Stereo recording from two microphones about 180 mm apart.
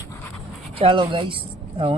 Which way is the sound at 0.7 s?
30° right (ahead or behind).